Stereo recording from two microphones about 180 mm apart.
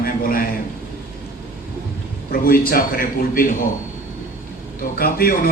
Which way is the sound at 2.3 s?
55° left (ahead or behind).